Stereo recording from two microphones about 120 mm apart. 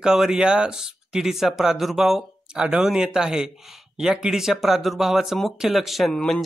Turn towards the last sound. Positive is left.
turn(degrees=5)  # may be behind; listen again after turning